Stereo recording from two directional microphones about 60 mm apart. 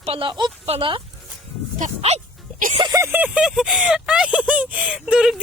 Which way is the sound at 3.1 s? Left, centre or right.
Right.